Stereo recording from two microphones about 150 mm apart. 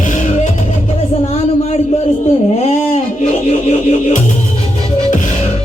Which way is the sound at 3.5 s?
45° left (ahead or behind).